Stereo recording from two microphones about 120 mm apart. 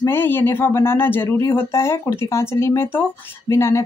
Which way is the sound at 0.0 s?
20° left (ahead or behind).